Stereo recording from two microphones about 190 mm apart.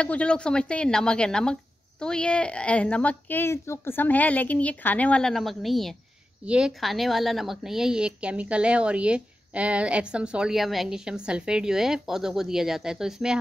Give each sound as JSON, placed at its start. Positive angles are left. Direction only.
{"t": 0.0, "sound": "a woman's voice", "side_deg": 5}